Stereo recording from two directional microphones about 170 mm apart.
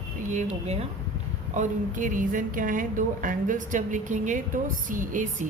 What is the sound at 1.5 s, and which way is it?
A woman's voice, 50° right (ahead or behind).